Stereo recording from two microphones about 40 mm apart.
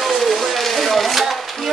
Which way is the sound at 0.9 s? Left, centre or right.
Centre.